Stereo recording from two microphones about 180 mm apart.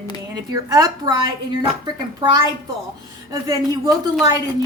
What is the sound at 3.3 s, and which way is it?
Speech, 20° right (ahead or behind).